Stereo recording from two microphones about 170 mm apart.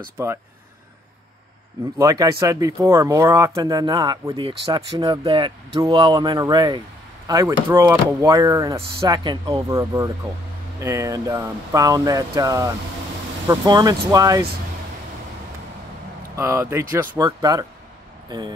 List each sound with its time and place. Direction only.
0.2 s speech: 15° right (ahead or behind)
2.0 s speech: 20° right (ahead or behind)
16.3 s speech: 15° right (ahead or behind)